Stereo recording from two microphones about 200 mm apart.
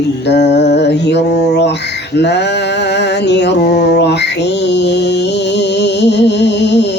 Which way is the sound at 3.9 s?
60° left (ahead or behind).